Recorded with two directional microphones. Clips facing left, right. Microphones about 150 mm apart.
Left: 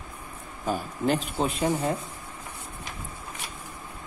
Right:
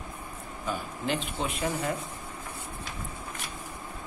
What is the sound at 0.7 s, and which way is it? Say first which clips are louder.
Speech: left 6 dB; 40° left (ahead or behind).